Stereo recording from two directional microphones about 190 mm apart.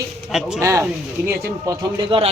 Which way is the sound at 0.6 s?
15° right (ahead or behind).